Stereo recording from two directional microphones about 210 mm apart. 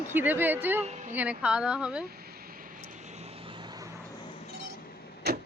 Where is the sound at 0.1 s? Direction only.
10° right (ahead or behind).